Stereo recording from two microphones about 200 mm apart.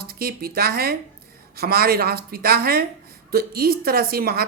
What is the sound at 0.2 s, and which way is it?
A woman's voice, 50° right (ahead or behind).